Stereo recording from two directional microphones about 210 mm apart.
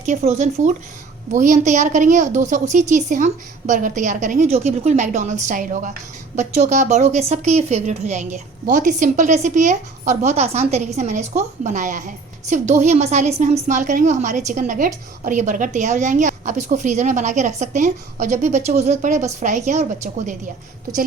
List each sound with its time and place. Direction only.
0.0 s a woman's voice: 35° right (ahead or behind)